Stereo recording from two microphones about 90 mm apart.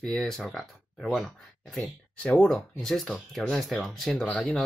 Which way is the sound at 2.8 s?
5° left (ahead or behind).